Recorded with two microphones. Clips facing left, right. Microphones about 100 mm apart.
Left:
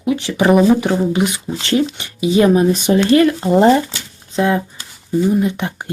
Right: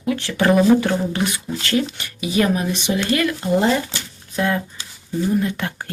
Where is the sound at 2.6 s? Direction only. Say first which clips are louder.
Left 8 dB; 40° left (ahead or behind).